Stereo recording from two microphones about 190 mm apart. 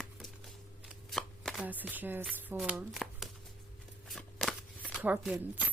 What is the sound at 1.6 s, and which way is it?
Speech, 10° right (ahead or behind).